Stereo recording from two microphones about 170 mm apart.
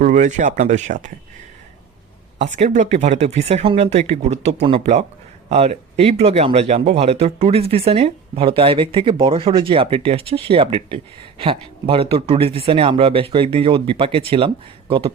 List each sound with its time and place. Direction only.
0.0 s speech: 45° right (ahead or behind)
2.4 s speech: 40° right (ahead or behind)